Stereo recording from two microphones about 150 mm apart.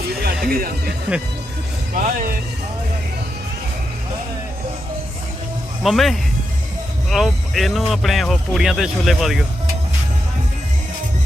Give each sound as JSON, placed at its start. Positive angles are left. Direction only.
{"t": 0.4, "sound": "speech", "side_deg": -85}
{"t": 1.9, "sound": "speech", "side_deg": -75}
{"t": 5.8, "sound": "speech", "side_deg": 0}